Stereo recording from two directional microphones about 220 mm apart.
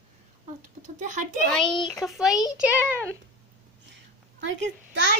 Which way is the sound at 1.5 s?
Centre (ahead or behind).